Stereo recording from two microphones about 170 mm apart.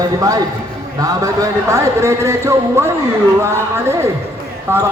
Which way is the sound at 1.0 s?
20° right (ahead or behind).